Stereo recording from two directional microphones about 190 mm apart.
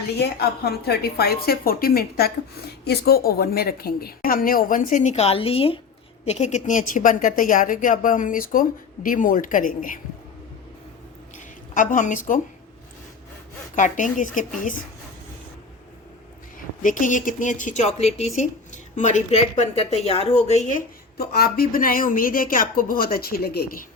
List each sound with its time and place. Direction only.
0.2 s a woman's voice: 55° left (ahead or behind)
11.3 s a sound: 45° left (ahead or behind)
13.7 s speech: 40° left (ahead or behind)
16.8 s speech: 45° left (ahead or behind)